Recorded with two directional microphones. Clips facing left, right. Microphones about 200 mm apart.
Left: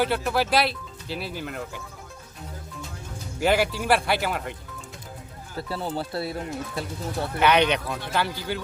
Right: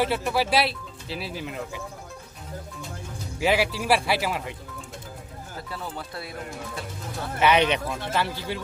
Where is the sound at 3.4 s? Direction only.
Centre (ahead or behind).